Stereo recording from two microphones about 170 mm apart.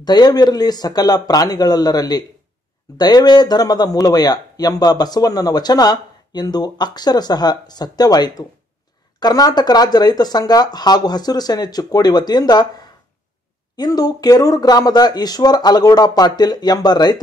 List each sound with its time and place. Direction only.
0.0 s speech: 25° left (ahead or behind)